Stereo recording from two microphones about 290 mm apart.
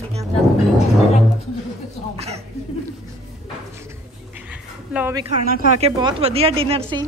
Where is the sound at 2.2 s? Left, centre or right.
Right.